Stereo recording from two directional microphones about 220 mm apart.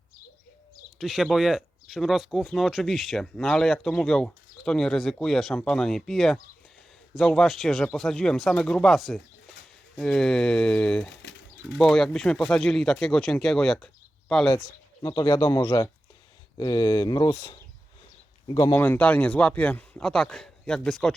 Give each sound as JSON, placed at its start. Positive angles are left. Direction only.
{"t": 0.9, "sound": "speech", "side_deg": 0}
{"t": 11.2, "sound": "bird", "side_deg": 50}
{"t": 11.8, "sound": "speech", "side_deg": 0}
{"t": 15.0, "sound": "speech", "side_deg": 15}
{"t": 18.7, "sound": "speech", "side_deg": 10}